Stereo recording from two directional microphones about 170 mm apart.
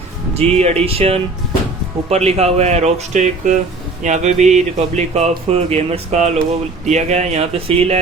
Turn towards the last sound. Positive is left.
turn(degrees=-35)  # may be behind; listen again after turning